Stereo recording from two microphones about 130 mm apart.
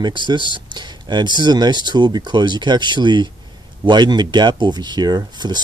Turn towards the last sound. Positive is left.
turn(degrees=-35)  # may be behind; listen again after turning